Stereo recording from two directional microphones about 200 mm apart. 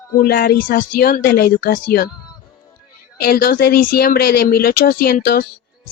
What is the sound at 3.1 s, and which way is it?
Speech, 50° left (ahead or behind).